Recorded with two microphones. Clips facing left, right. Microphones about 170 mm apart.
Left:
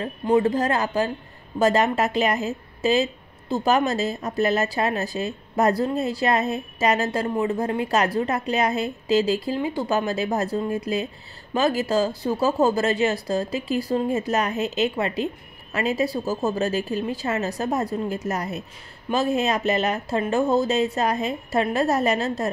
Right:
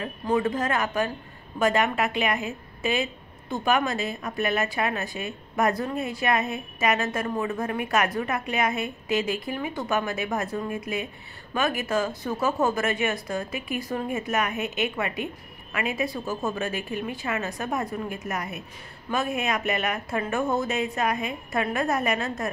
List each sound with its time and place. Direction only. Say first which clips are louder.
0.0 s speech: left 5 dB; 25° left (ahead or behind)
0.4 s a woman's voice: left 4 dB; 35° left (ahead or behind)